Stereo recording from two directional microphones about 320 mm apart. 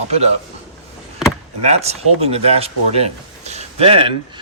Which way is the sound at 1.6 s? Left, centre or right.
Centre.